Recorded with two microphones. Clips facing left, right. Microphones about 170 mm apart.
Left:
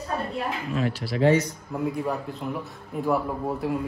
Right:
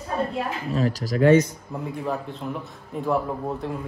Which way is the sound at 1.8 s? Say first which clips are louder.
Left 2 dB; centre (ahead or behind).